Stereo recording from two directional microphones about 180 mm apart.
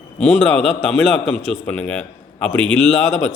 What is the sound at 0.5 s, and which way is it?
Speech, centre (ahead or behind).